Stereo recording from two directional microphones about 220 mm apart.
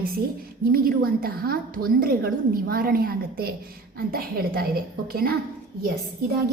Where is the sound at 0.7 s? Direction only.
40° right (ahead or behind).